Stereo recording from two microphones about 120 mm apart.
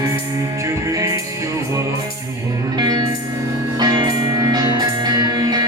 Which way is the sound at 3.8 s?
35° right (ahead or behind).